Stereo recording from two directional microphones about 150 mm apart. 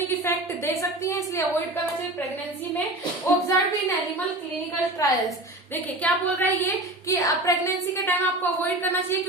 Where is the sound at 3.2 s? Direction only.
20° left (ahead or behind).